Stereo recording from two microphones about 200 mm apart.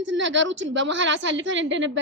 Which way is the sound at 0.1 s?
65° right (ahead or behind).